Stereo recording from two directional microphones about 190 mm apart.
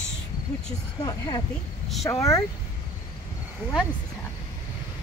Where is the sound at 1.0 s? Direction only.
20° left (ahead or behind).